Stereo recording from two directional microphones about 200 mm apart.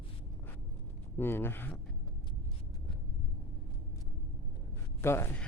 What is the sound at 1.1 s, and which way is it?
Speech, 10° left (ahead or behind).